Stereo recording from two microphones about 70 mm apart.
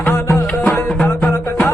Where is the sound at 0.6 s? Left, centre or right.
Left.